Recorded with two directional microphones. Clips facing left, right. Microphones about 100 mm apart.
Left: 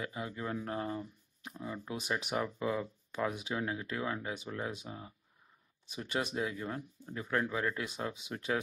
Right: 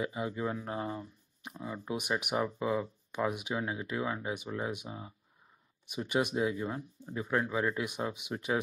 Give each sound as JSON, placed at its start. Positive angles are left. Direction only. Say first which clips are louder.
{"t": 0.0, "sound": "speech", "louder": "right 5 dB", "side_deg": -20}